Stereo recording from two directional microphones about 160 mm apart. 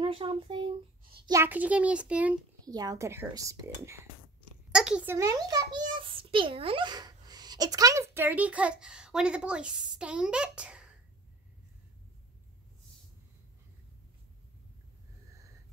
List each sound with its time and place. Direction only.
0.0 s speech: 30° right (ahead or behind)
1.2 s a child's voice: 15° right (ahead or behind)
2.6 s speech: 25° right (ahead or behind)
4.7 s a sound: 5° right (ahead or behind)
5.1 s a child's voice: 20° right (ahead or behind)